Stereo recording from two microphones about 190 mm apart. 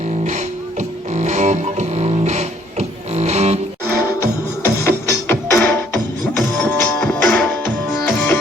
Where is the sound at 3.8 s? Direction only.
10° right (ahead or behind).